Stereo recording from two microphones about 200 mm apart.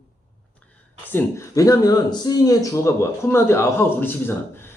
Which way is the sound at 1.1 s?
15° left (ahead or behind).